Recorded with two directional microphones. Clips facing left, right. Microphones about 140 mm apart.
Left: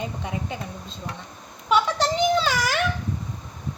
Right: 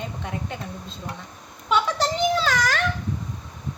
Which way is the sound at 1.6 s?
Centre (ahead or behind).